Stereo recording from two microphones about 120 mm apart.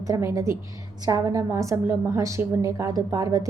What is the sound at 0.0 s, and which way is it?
A woman's voice, 25° right (ahead or behind).